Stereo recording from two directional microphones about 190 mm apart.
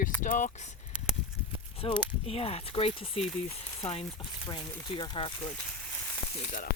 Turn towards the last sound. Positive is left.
turn(degrees=35)  # may be behind; listen again after turning